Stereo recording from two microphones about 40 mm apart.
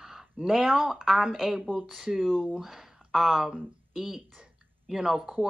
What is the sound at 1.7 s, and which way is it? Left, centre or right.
Speech, centre.